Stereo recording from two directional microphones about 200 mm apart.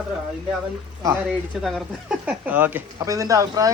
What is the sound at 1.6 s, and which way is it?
Speech, centre (ahead or behind).